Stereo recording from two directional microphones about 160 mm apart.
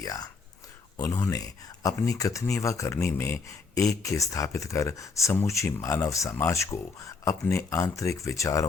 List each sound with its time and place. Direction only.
0.0 s speech: 20° left (ahead or behind)